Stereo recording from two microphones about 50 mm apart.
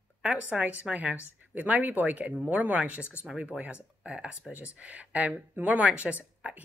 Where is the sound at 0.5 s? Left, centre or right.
Centre.